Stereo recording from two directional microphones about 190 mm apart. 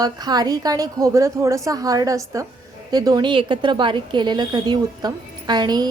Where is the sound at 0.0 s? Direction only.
20° right (ahead or behind).